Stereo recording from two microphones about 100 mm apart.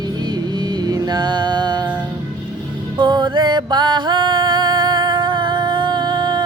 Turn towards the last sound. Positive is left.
turn(degrees=-45)  # may be behind; listen again after turning